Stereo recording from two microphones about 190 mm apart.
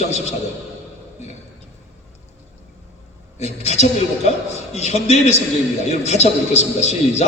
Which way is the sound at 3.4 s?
35° left (ahead or behind).